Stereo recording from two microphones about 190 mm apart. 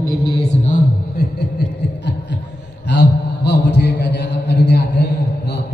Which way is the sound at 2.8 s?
65° left (ahead or behind).